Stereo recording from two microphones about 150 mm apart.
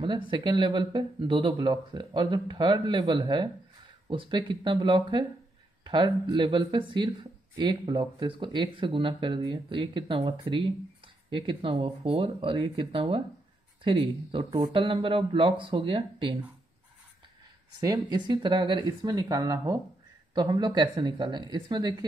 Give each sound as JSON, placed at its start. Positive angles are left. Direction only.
{"t": 0.3, "sound": "speech", "side_deg": -30}
{"t": 17.7, "sound": "speech", "side_deg": -25}